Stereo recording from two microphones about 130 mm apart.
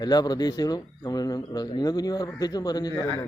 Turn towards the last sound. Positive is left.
turn(degrees=30)  # may be behind; listen again after turning